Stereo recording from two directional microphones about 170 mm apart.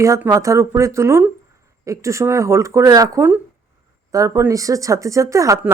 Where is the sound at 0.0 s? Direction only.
20° right (ahead or behind).